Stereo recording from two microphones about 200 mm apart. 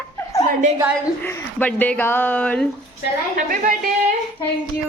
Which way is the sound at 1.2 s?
10° left (ahead or behind).